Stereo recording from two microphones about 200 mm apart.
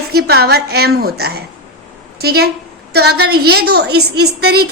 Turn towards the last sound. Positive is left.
turn(degrees=-55)  # may be behind; listen again after turning